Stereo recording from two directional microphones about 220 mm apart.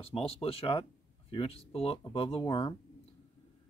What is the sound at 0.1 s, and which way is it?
Speech, 25° left (ahead or behind).